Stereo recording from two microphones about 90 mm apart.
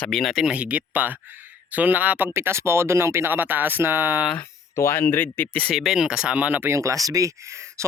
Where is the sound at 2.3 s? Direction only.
30° right (ahead or behind).